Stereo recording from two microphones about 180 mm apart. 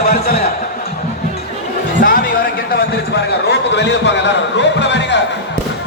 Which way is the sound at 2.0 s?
55° left (ahead or behind).